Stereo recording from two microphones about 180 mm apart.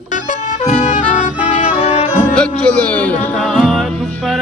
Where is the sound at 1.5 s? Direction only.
35° left (ahead or behind).